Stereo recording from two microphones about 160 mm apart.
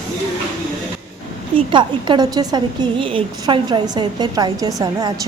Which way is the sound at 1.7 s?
30° right (ahead or behind).